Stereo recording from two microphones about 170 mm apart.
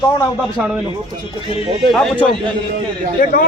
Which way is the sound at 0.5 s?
5° right (ahead or behind).